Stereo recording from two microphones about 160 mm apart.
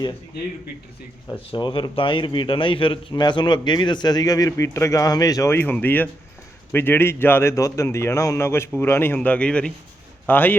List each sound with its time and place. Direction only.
1.5 s a man's voice: 30° left (ahead or behind); by 10.5 s 10° left (ahead or behind)